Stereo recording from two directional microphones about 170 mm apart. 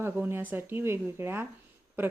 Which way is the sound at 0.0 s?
15° right (ahead or behind).